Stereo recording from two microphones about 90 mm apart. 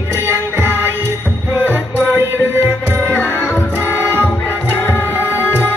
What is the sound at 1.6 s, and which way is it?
Music, 25° right (ahead or behind).